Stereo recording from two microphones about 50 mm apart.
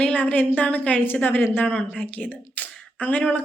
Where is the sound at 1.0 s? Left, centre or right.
Left.